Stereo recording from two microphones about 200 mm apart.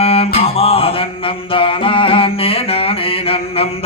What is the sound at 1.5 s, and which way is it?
Mantra, 25° left (ahead or behind).